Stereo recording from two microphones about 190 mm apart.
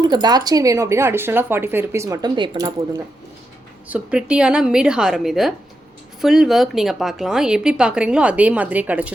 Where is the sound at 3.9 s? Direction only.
5° right (ahead or behind).